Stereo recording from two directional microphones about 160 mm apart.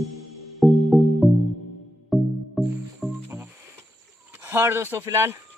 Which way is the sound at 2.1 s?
Centre (ahead or behind).